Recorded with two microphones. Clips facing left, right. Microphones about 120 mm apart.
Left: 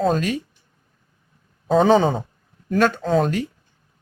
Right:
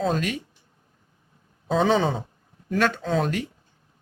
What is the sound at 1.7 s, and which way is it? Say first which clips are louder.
Speech: left 5 dB; 45° left (ahead or behind).